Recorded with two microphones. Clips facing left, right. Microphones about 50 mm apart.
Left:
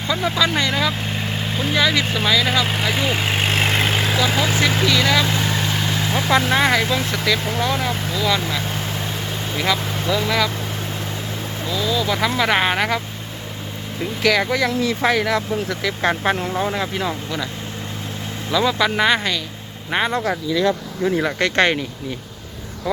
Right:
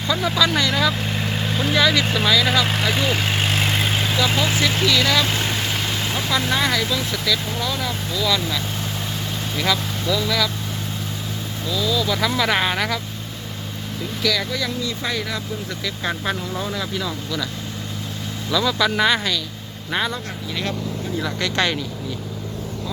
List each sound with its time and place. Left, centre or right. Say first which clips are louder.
0.1 s speech: even; centre
3.3 s vehicle: left 2 dB; left
4.2 s speech: even; centre
6.1 s speech: left 5 dB; left
9.6 s speech: left 1 dB; centre
11.6 s speech: left 1 dB; left
14.2 s speech: left 6 dB; left
18.5 s speech: left 2 dB; left
21.2 s speech: left 3 dB; left